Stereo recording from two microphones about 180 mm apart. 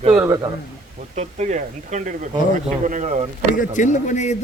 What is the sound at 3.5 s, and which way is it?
Speech, 45° left (ahead or behind).